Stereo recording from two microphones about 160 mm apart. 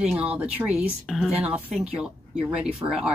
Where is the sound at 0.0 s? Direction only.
5° right (ahead or behind).